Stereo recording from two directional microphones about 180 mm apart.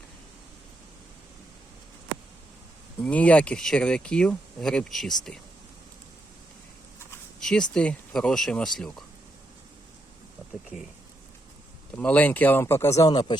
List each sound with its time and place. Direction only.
3.0 s speech: 10° left (ahead or behind)
7.3 s speech: 5° left (ahead or behind)
11.9 s speech: 10° left (ahead or behind)